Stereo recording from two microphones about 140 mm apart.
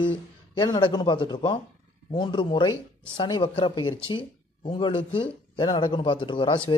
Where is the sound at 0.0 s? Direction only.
30° left (ahead or behind).